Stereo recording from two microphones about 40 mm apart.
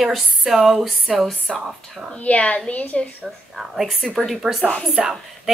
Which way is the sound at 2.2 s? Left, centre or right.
Left.